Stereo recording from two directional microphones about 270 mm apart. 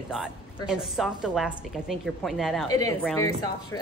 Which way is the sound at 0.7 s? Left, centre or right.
Centre.